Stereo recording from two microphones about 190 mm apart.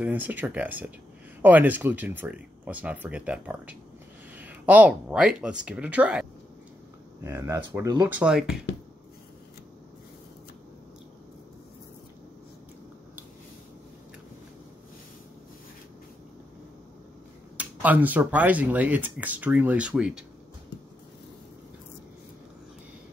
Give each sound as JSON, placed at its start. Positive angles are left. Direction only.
{"t": 0.0, "sound": "speech", "side_deg": -10}
{"t": 7.2, "sound": "speech", "side_deg": -15}
{"t": 8.1, "sound": "speech", "side_deg": -5}
{"t": 17.6, "sound": "speech", "side_deg": -10}